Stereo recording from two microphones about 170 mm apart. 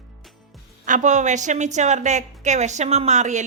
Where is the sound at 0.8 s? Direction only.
45° right (ahead or behind).